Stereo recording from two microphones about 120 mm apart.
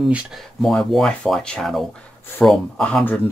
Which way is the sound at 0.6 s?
Centre (ahead or behind).